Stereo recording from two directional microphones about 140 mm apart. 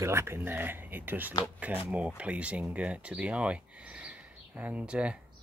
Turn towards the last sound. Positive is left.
turn(degrees=-5)  # may be behind; listen again after turning